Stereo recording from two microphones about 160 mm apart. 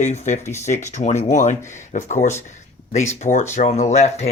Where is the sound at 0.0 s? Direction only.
45° left (ahead or behind).